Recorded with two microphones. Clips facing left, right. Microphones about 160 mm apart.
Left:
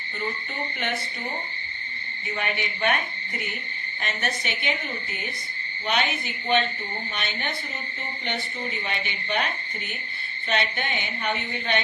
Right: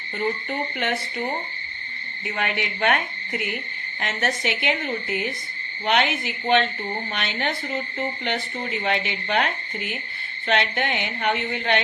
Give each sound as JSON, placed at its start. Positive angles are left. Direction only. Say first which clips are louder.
{"t": 2.3, "sound": "speech", "louder": "right 2 dB", "side_deg": -65}
{"t": 4.0, "sound": "a woman's voice", "louder": "right 5 dB", "side_deg": -85}
{"t": 5.8, "sound": "a woman's voice", "louder": "right 4 dB", "side_deg": -75}